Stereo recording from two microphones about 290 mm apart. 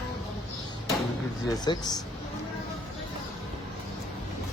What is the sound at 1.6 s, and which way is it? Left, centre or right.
Speech, centre.